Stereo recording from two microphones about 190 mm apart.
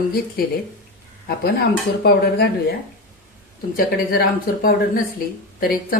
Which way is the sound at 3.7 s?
50° left (ahead or behind).